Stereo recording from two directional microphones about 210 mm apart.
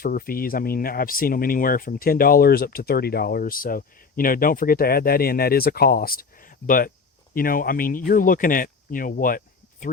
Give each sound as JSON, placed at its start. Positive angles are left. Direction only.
{"t": 0.0, "sound": "speech", "side_deg": 45}